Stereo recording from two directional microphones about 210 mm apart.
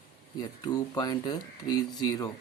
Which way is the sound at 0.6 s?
20° left (ahead or behind).